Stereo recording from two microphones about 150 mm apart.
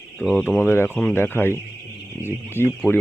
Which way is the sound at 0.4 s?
15° left (ahead or behind).